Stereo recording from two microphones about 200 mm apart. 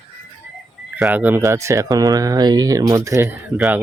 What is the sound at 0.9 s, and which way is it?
Speech, 10° right (ahead or behind).